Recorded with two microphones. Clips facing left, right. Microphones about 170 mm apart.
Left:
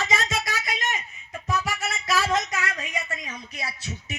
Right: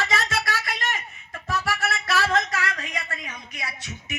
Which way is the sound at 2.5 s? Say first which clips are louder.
Right 1 dB; 20° left (ahead or behind).